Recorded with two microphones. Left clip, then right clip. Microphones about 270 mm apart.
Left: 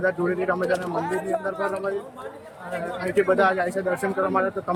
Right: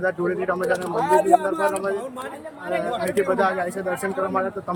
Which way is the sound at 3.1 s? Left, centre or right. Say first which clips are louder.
Left 3 dB; centre.